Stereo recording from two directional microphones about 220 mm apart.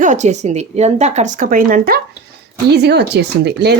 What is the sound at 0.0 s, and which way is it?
Speech, 35° right (ahead or behind).